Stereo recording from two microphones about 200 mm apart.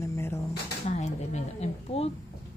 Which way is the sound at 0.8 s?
35° left (ahead or behind).